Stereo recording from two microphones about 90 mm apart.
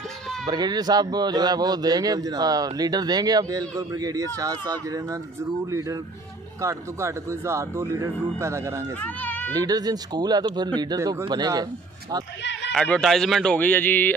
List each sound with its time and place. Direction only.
0.4 s a man's voice: 50° right (ahead or behind); by 8.8 s 35° right (ahead or behind)
9.0 s speech: 20° left (ahead or behind)
9.6 s a man's voice: 45° right (ahead or behind)
11.3 s a man's voice: 50° right (ahead or behind)
12.7 s speech: 5° left (ahead or behind)
13.6 s a sound: 20° left (ahead or behind)